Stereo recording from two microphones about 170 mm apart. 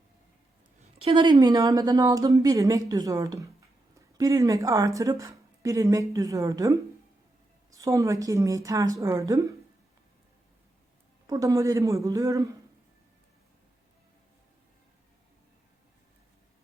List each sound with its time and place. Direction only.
1.0 s speech: 25° right (ahead or behind)
11.3 s speech: 20° right (ahead or behind)